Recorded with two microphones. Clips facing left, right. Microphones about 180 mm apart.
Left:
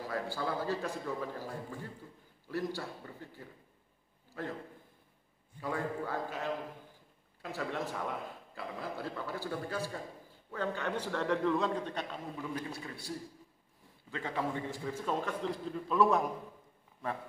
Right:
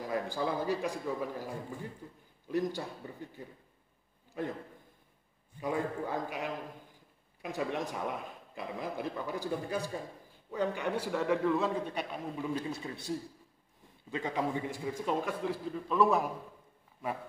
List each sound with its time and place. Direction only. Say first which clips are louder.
0.0 s a man's voice: right 3 dB; 15° right (ahead or behind)
5.6 s a man's voice: right 2 dB; 15° right (ahead or behind)
14.1 s a man's voice: right 3 dB; 15° right (ahead or behind)